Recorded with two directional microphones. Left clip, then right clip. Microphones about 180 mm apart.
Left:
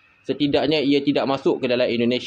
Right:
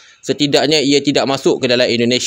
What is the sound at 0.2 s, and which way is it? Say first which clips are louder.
A man's voice: right 7 dB; 50° right (ahead or behind).